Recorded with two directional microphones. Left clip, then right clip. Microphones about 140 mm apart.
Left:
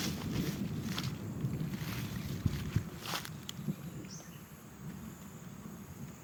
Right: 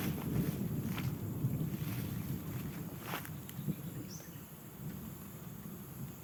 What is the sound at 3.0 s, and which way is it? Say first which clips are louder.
Walk: left 3 dB; 90° left.